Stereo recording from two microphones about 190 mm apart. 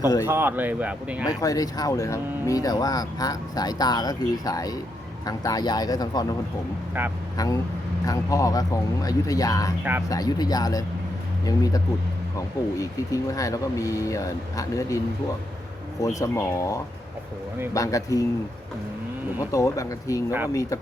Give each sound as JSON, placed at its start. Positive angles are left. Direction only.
{"t": 0.0, "sound": "speech", "side_deg": 20}
{"t": 0.3, "sound": "speech", "side_deg": -10}
{"t": 1.2, "sound": "speech", "side_deg": 20}
{"t": 7.3, "sound": "speech", "side_deg": 20}
{"t": 12.8, "sound": "speech", "side_deg": 15}
{"t": 19.5, "sound": "speech", "side_deg": 15}